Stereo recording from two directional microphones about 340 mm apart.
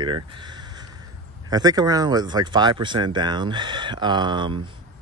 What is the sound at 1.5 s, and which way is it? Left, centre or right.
Speech, centre.